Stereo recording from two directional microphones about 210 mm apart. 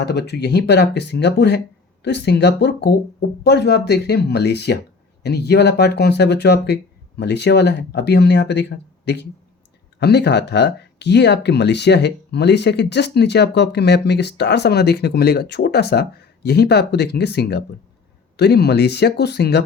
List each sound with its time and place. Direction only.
0.0 s speech: 50° left (ahead or behind)